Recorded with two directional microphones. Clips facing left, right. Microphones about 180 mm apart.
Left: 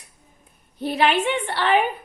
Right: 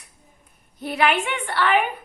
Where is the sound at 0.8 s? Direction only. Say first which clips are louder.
Left 2 dB; 25° left (ahead or behind).